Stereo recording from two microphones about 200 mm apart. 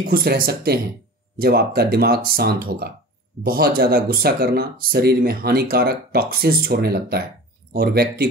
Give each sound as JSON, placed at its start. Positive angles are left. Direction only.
{"t": 0.0, "sound": "speech", "side_deg": -50}